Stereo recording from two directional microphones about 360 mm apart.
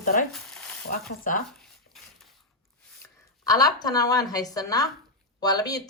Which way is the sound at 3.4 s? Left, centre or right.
Centre.